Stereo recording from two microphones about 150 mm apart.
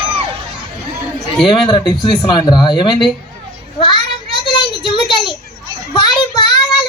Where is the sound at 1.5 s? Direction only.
35° left (ahead or behind).